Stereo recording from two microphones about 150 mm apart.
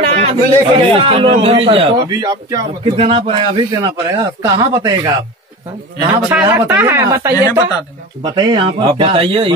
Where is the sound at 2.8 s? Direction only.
40° right (ahead or behind).